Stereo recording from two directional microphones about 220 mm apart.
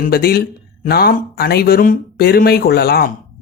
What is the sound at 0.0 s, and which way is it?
Speech, 45° left (ahead or behind).